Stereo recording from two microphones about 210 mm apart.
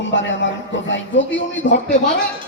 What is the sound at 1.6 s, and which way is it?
Speech, 35° left (ahead or behind).